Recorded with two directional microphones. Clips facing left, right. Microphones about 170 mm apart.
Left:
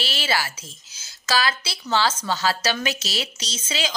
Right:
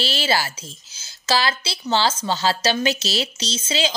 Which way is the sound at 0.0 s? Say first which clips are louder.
Right 3 dB; 30° right (ahead or behind).